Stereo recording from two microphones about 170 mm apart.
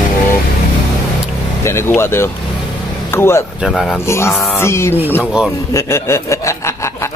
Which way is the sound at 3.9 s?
15° left (ahead or behind).